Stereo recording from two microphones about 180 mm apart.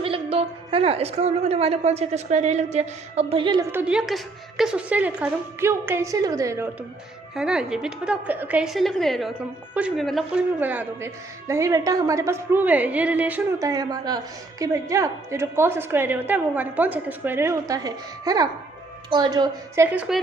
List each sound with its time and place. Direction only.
0.0 s a woman's voice: 30° right (ahead or behind)
3.7 s a woman's voice: 10° right (ahead or behind)
7.3 s a woman's voice: 5° right (ahead or behind)